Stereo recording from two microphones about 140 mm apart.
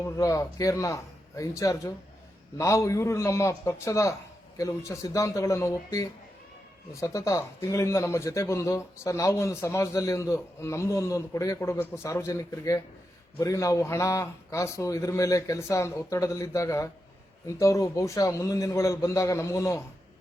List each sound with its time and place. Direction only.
0.0 s a man's voice: 25° left (ahead or behind)